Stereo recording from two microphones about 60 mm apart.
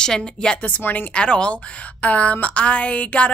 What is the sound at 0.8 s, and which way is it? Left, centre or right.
Speech, left.